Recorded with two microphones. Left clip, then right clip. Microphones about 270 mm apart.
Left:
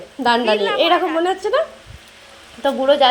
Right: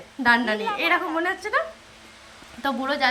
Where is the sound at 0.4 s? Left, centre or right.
Centre.